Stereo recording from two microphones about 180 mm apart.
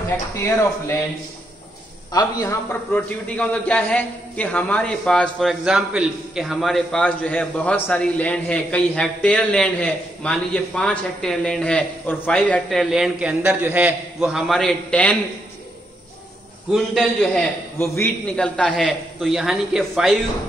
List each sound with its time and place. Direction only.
0.4 s speech: 15° left (ahead or behind)
2.9 s a man's voice: 5° left (ahead or behind)
16.7 s a man's voice: centre (ahead or behind)